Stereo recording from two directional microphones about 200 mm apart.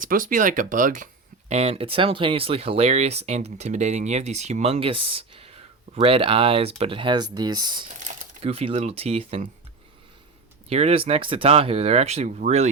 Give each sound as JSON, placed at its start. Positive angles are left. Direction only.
{"t": 0.0, "sound": "speech", "side_deg": -45}
{"t": 1.5, "sound": "speech", "side_deg": -30}
{"t": 7.9, "sound": "typing", "side_deg": -40}
{"t": 8.4, "sound": "speech", "side_deg": -30}
{"t": 10.7, "sound": "speech", "side_deg": -30}